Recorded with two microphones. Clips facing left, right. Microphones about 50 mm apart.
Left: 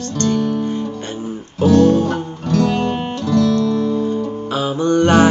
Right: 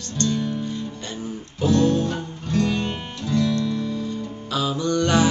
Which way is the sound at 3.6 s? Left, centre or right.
Left.